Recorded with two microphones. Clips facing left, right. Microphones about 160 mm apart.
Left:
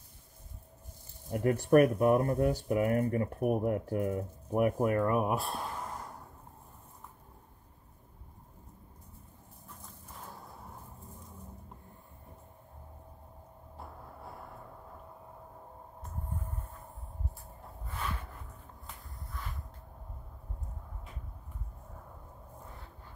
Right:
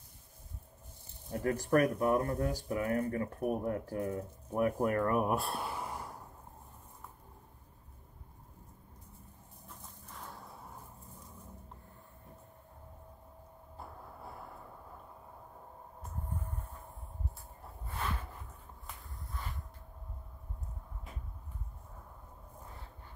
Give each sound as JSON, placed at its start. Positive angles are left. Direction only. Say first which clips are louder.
{"t": 1.3, "sound": "speech", "louder": "left 5 dB", "side_deg": 20}